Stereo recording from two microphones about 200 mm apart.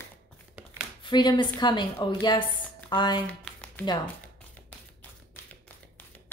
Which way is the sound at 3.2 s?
5° left (ahead or behind).